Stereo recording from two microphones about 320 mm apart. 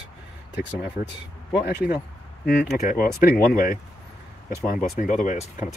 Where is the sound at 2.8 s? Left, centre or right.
Left.